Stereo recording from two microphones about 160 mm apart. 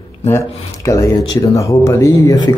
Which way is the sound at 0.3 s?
20° left (ahead or behind).